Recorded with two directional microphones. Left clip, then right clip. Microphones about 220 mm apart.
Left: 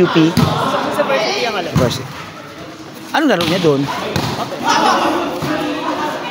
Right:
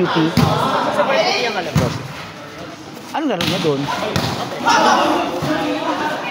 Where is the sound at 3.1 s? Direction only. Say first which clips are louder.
Left 6 dB; 45° left (ahead or behind).